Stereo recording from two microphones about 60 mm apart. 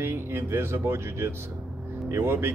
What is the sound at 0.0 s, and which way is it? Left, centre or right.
Speech, right.